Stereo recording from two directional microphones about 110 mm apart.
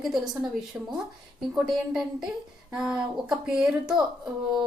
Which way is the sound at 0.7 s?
20° right (ahead or behind).